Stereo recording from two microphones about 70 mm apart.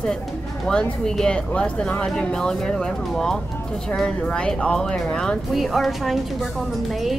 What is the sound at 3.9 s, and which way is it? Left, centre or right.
Speech, centre.